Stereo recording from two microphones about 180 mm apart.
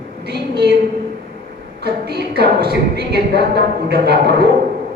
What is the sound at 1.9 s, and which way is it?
A woman's voice, 65° right (ahead or behind).